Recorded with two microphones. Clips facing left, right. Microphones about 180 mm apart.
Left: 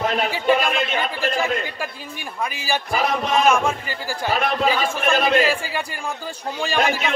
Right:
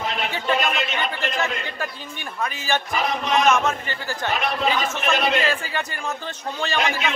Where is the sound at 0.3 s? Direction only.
10° left (ahead or behind).